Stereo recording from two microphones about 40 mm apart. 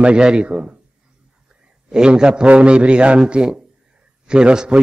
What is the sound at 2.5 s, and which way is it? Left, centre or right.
A man's voice, right.